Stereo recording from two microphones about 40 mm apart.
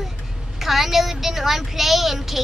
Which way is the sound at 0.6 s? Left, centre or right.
Centre.